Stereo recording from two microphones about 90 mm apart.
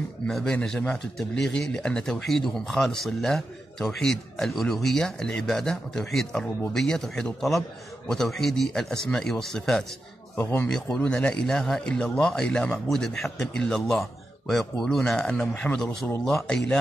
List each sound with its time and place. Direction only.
0.3 s speech: 5° left (ahead or behind)
10.3 s speech: 30° left (ahead or behind)
10.7 s speech: 10° left (ahead or behind)